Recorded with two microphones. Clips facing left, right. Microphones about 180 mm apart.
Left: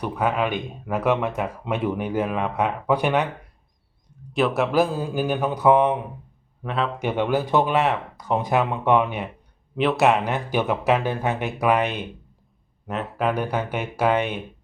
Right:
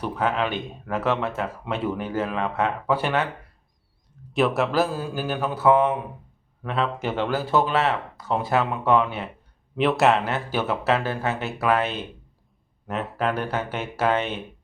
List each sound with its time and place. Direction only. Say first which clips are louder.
0.0 s speech: left 1 dB; 10° left (ahead or behind)
4.4 s speech: even; centre (ahead or behind)
4.7 s speech: left 3 dB; 15° left (ahead or behind)
6.7 s speech: even; centre (ahead or behind)
7.2 s speech: left 2 dB; 15° left (ahead or behind)
9.7 s speech: even; centre (ahead or behind)
10.2 s speech: left 2 dB; 15° left (ahead or behind)
12.9 s speech: left 1 dB; centre (ahead or behind)
13.3 s speech: left 2 dB; 15° left (ahead or behind)